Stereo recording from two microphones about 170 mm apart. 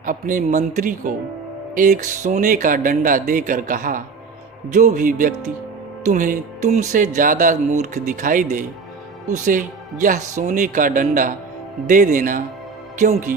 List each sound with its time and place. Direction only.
0.0 s speech: 50° right (ahead or behind)